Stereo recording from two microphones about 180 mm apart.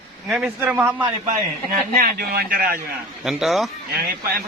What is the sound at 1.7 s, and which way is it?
Speech, 55° right (ahead or behind).